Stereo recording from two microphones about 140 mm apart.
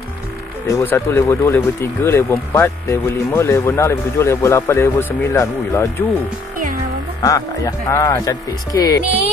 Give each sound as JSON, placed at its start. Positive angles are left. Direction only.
{"t": 0.7, "sound": "speech", "side_deg": 20}
{"t": 7.2, "sound": "speech", "side_deg": 25}